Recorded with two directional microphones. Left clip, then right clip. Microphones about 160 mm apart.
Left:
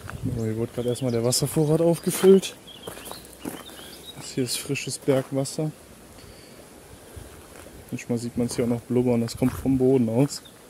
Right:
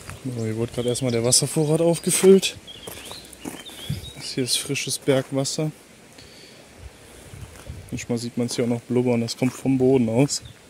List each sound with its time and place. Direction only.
0.4 s speech: 5° right (ahead or behind)
4.2 s speech: centre (ahead or behind)
5.0 s speech: 15° right (ahead or behind)
7.9 s speech: 5° right (ahead or behind)
9.8 s speech: 15° right (ahead or behind)